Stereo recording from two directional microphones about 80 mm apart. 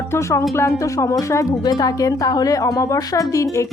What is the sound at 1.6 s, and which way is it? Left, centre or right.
A woman's voice, left.